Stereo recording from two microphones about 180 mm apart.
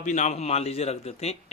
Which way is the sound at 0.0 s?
40° left (ahead or behind).